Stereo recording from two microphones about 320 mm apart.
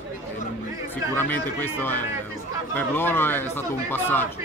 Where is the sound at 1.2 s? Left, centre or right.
Centre.